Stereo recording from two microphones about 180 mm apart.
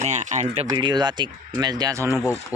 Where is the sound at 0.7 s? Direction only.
25° right (ahead or behind).